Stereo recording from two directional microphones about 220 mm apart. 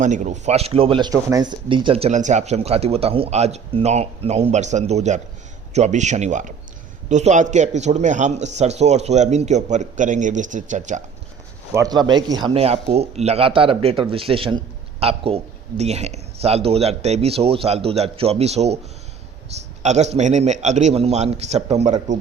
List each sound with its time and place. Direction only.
0.0 s a man's voice: 35° right (ahead or behind)
11.7 s speech: 15° right (ahead or behind)
19.8 s a man's voice: 30° right (ahead or behind)